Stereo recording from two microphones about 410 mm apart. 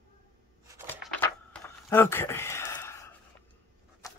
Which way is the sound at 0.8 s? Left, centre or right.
Centre.